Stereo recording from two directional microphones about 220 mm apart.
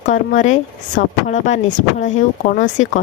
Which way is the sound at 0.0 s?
35° left (ahead or behind).